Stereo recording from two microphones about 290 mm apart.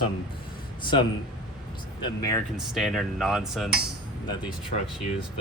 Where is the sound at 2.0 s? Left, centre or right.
Centre.